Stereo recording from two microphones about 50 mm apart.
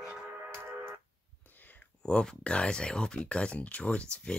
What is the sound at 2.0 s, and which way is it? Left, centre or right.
Speech, centre.